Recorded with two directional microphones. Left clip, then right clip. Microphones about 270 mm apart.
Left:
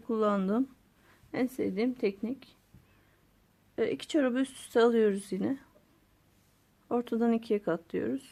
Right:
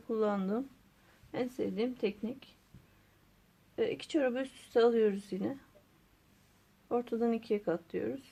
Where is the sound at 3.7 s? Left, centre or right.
Left.